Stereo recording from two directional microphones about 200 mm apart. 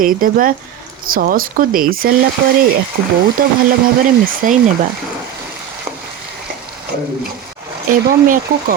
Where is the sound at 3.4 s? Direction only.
45° right (ahead or behind).